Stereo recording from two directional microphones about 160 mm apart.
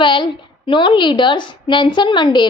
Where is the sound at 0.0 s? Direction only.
30° left (ahead or behind).